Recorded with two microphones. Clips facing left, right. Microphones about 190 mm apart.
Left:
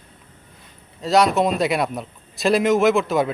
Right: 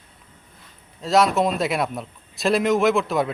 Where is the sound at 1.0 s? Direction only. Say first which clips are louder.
Left 1 dB; centre (ahead or behind).